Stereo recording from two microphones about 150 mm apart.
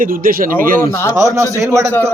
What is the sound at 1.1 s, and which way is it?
Speech, 20° right (ahead or behind).